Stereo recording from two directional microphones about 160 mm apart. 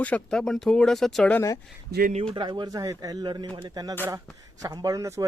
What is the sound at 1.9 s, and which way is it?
Speech, 90° right.